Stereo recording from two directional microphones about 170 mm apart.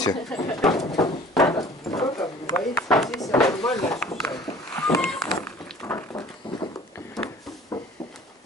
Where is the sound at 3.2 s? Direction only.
20° left (ahead or behind).